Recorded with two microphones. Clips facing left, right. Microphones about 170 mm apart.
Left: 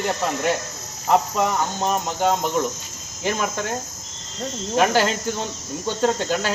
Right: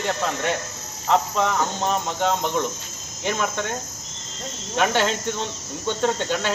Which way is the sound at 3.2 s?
5° left (ahead or behind).